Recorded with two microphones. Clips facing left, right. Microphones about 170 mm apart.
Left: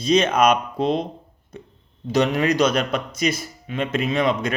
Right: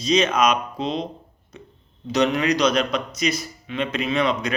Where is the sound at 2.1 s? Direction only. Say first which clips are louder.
Left 1 dB; 50° left (ahead or behind).